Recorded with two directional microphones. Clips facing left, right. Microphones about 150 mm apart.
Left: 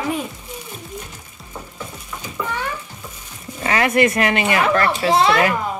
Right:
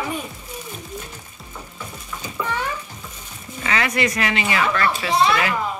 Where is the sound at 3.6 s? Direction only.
50° left (ahead or behind).